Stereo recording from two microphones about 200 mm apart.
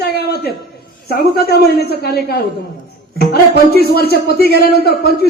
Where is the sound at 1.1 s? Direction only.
50° left (ahead or behind).